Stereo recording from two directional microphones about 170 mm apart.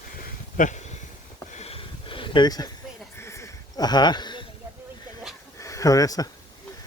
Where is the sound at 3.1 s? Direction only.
15° left (ahead or behind).